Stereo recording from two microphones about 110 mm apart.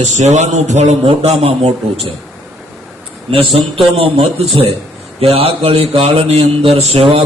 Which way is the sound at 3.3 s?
55° right (ahead or behind).